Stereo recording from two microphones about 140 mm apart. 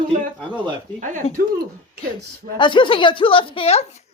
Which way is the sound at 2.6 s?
35° left (ahead or behind).